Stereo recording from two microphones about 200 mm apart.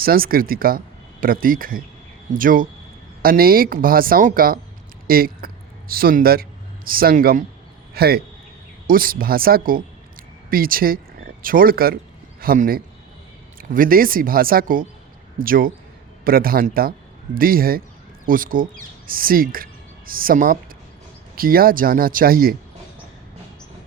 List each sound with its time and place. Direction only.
0.0 s a woman's voice: 45° right (ahead or behind)